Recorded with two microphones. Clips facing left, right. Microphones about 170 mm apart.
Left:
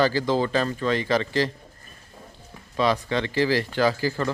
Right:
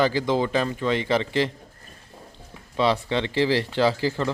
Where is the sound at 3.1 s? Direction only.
25° right (ahead or behind).